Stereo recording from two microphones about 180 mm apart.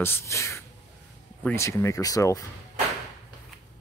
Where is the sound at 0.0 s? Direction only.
15° left (ahead or behind).